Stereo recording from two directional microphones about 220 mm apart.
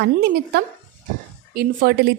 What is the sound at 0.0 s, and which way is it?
A woman's voice, 45° right (ahead or behind).